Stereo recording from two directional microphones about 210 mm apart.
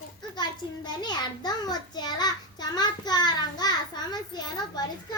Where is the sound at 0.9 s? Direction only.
20° left (ahead or behind).